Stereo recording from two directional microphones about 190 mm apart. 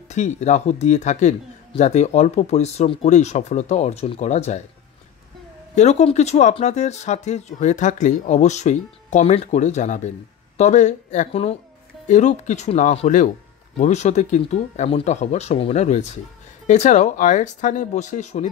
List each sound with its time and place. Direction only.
0.1 s speech: 40° left (ahead or behind)
5.8 s speech: 35° left (ahead or behind)